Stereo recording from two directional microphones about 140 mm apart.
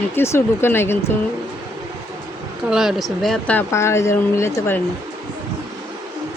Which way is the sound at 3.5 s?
20° left (ahead or behind).